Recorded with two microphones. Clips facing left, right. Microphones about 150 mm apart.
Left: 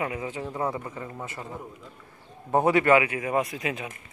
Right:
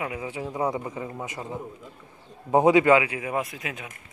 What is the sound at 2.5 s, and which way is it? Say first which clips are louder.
Speech: right 3 dB; 15° right (ahead or behind).